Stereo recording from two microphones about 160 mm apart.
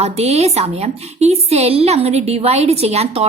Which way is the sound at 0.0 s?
40° right (ahead or behind).